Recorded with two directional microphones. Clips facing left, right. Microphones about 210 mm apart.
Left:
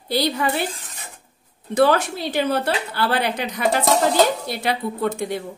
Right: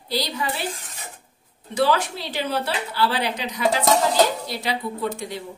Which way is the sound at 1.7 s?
50° left (ahead or behind).